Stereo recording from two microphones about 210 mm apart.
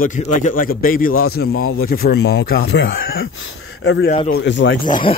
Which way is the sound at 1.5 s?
80° left.